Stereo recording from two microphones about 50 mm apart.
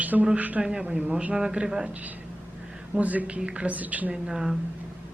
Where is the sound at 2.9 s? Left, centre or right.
Right.